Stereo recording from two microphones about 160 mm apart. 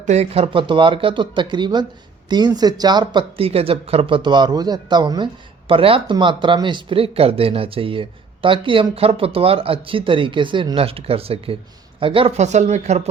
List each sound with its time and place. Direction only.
0.0 s speech: 45° right (ahead or behind)